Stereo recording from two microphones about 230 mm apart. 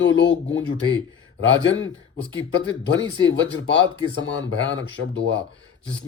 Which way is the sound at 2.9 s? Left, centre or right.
Left.